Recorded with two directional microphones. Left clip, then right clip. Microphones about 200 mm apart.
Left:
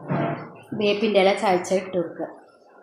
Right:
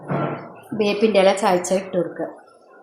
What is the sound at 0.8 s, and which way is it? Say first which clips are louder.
A woman's voice: right 3 dB; 25° right (ahead or behind).